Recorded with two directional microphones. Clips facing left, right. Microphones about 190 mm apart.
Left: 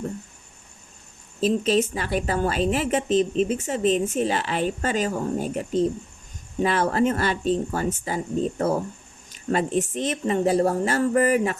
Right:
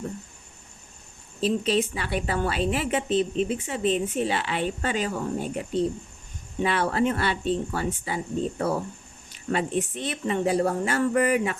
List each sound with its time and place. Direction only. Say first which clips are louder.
1.4 s a woman's voice: left 3 dB; 45° left (ahead or behind)